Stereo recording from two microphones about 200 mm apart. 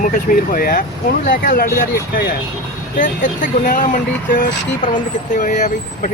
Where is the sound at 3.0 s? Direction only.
40° left (ahead or behind).